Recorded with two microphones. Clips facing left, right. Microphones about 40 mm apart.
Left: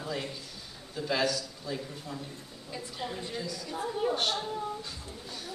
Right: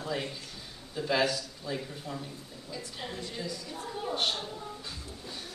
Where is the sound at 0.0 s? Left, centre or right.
Centre.